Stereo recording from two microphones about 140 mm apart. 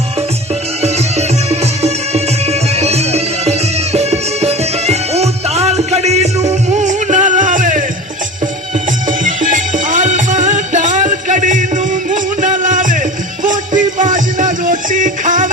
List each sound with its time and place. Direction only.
0.8 s music: 50° right (ahead or behind); by 7.9 s 70° right (ahead or behind)
9.0 s music: 70° right (ahead or behind)